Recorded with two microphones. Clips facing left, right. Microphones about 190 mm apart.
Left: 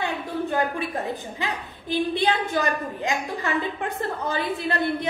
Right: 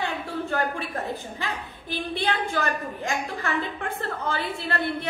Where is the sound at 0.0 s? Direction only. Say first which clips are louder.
Left 2 dB; 15° left (ahead or behind).